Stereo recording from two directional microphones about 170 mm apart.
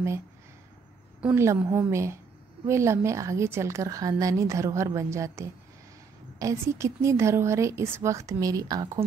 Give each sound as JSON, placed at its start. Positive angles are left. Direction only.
{"t": 1.2, "sound": "a woman's voice", "side_deg": -15}